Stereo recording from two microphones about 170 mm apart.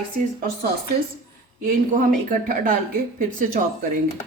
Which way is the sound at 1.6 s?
50° right (ahead or behind).